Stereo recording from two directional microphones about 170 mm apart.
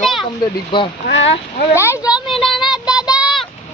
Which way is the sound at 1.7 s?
15° left (ahead or behind).